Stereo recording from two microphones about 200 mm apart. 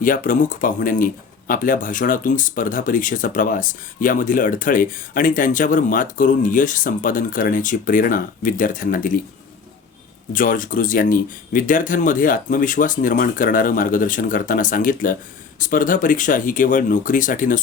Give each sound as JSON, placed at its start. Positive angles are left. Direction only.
{"t": 0.0, "sound": "speech", "side_deg": 40}
{"t": 10.3, "sound": "speech", "side_deg": 40}